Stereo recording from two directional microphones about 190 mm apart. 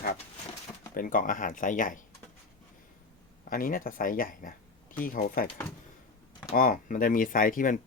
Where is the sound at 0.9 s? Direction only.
45° left (ahead or behind).